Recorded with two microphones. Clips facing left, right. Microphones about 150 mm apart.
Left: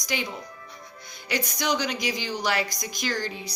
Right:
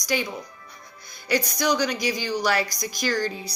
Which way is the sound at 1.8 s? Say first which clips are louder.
Right 4 dB; 20° left (ahead or behind).